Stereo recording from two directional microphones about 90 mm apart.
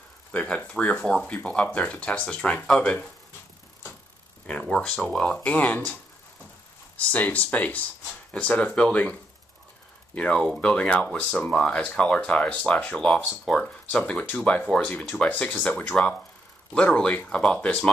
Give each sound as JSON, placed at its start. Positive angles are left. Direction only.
{"t": 0.3, "sound": "speech", "side_deg": 10}
{"t": 4.5, "sound": "speech", "side_deg": 10}
{"t": 7.0, "sound": "speech", "side_deg": 15}
{"t": 10.1, "sound": "speech", "side_deg": 10}